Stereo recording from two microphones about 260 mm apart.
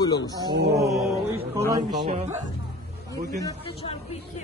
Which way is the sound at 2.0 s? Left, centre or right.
Right.